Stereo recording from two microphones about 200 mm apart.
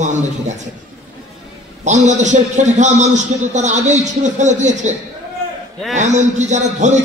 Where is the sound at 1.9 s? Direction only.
35° right (ahead or behind).